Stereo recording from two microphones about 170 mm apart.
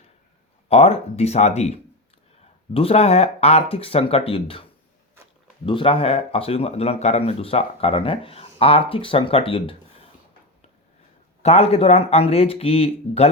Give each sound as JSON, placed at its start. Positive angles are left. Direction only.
{"t": 0.7, "sound": "speech", "side_deg": 35}
{"t": 5.6, "sound": "speech", "side_deg": 30}
{"t": 11.4, "sound": "speech", "side_deg": 40}